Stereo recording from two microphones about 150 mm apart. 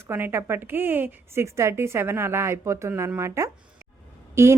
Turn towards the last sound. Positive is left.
turn(degrees=-15)  # may be behind; listen again after turning